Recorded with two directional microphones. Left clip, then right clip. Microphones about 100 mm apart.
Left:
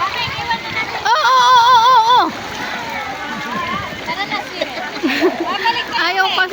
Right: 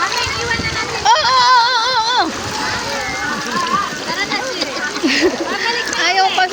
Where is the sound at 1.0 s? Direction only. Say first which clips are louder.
Even; 30° left (ahead or behind).